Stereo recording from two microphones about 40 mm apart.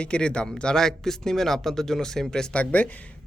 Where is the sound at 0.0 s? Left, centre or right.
Left.